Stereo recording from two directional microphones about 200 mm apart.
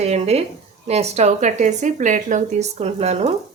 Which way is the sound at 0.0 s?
30° right (ahead or behind).